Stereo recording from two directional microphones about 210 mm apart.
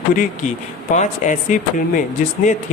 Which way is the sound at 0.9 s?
35° left (ahead or behind).